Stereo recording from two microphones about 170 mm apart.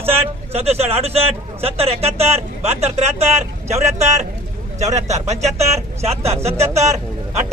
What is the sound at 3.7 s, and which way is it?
Speech, 15° right (ahead or behind).